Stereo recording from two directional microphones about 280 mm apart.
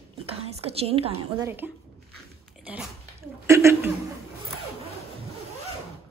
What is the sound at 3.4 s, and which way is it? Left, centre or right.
Chuckle, centre.